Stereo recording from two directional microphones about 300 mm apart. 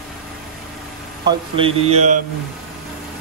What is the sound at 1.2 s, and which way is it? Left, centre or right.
Speech, centre.